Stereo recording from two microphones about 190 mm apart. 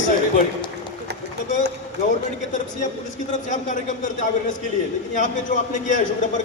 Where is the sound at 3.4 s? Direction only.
40° left (ahead or behind).